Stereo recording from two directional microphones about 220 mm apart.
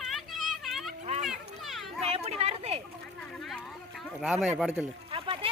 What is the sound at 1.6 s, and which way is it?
Children playing, centre (ahead or behind).